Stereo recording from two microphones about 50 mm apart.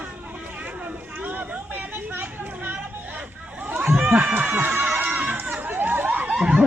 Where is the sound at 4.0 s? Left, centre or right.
Right.